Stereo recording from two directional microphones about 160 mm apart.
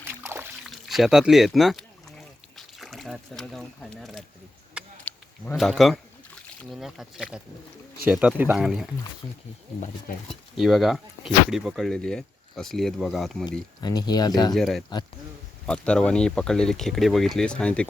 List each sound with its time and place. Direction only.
0.0 s trickle: 15° right (ahead or behind)
0.6 s speech: centre (ahead or behind)
5.1 s a sound: 10° left (ahead or behind)
5.5 s speech: centre (ahead or behind)
10.2 s speech: centre (ahead or behind)
13.8 s speech: 25° left (ahead or behind)
14.5 s speech: centre (ahead or behind)